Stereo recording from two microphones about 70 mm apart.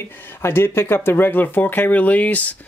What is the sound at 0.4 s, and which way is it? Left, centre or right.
Speech, left.